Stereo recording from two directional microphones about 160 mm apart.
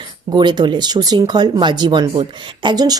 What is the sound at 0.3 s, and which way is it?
Speech, 25° right (ahead or behind).